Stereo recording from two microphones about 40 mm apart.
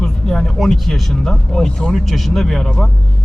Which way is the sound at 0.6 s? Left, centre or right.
Centre.